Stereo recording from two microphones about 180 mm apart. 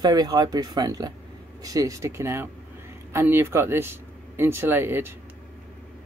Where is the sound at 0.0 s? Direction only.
20° right (ahead or behind).